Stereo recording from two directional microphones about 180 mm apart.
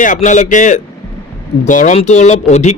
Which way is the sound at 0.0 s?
45° left (ahead or behind).